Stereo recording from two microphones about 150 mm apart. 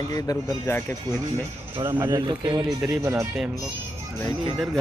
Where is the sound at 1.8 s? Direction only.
15° right (ahead or behind).